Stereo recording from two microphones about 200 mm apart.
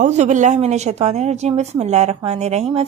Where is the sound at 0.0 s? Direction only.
40° right (ahead or behind).